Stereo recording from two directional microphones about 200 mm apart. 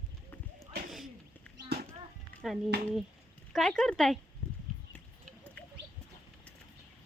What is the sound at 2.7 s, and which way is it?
Speech, 55° right (ahead or behind).